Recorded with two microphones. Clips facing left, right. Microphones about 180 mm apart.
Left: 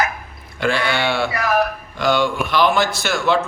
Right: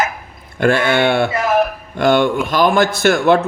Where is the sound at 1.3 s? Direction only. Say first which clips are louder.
Right 3 dB; 25° right (ahead or behind).